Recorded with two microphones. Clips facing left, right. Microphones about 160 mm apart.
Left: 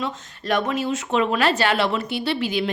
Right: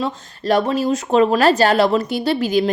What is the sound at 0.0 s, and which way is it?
A woman's voice, 35° right (ahead or behind).